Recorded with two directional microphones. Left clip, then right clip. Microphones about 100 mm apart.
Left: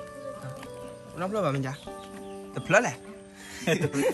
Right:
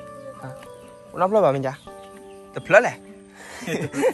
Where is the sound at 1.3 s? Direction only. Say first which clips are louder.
Right 10 dB; 20° right (ahead or behind).